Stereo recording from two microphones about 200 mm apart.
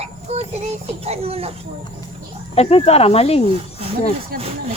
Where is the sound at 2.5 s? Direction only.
30° left (ahead or behind).